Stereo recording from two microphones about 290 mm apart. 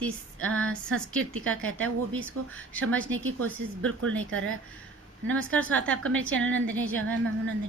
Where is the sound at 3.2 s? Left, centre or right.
Right.